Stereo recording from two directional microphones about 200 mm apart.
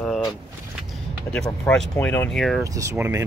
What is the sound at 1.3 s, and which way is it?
Speech, 5° left (ahead or behind).